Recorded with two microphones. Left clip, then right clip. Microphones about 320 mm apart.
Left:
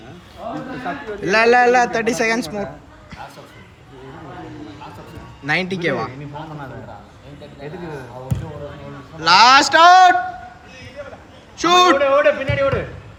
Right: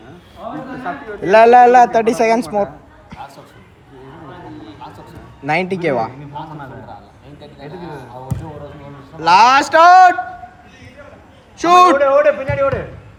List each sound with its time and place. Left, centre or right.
0.4 s a sound: centre
0.9 s a man's voice: centre
5.5 s a man's voice: centre
7.6 s a man's voice: centre
9.1 s a man's voice: centre
11.5 s a man's voice: centre